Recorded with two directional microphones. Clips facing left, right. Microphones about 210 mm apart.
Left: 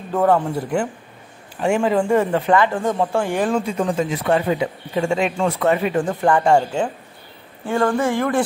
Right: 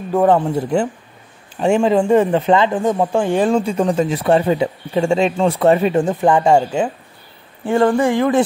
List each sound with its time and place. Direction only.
0.1 s a man's voice: 15° right (ahead or behind)